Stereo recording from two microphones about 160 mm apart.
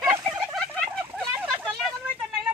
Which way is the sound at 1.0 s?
10° right (ahead or behind).